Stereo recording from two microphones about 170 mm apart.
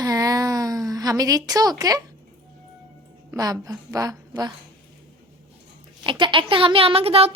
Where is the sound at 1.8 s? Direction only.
20° right (ahead or behind).